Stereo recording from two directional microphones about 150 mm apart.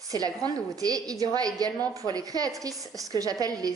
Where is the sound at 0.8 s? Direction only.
25° right (ahead or behind).